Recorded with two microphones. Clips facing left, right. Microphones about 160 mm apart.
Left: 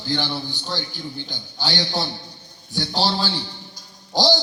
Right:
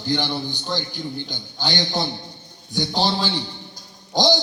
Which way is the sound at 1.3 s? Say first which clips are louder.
Left 1 dB; 20° right (ahead or behind).